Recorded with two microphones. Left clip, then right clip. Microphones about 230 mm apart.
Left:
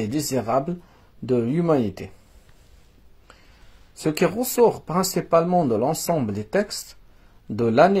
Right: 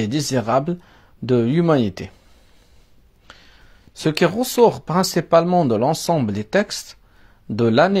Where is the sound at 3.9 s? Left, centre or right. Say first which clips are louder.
Right 4 dB; right.